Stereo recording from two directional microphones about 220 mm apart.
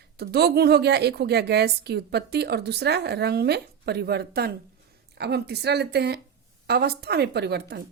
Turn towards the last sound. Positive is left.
turn(degrees=-50)  # may be behind; listen again after turning